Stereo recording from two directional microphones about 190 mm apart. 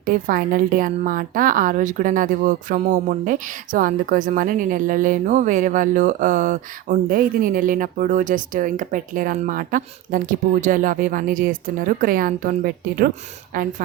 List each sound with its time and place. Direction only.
0.0 s a woman's voice: 45° right (ahead or behind)